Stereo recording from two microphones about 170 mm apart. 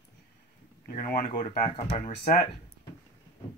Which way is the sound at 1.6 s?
35° left (ahead or behind).